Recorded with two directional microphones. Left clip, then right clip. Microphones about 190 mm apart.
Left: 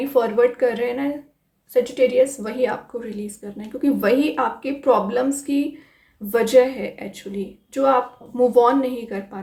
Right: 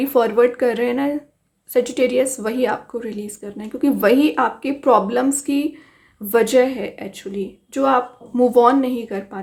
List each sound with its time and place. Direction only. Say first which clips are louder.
0.1 s a woman's voice: right 2 dB; 35° right (ahead or behind)